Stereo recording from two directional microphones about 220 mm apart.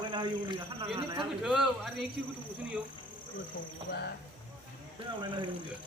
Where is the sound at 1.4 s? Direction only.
Centre (ahead or behind).